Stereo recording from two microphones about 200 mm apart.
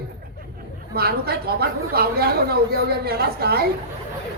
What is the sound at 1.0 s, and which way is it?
Speech, 50° right (ahead or behind).